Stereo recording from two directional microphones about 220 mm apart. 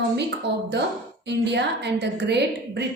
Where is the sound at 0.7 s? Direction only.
50° right (ahead or behind).